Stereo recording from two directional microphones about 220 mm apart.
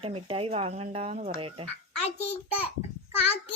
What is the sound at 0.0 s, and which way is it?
Speech, 25° right (ahead or behind).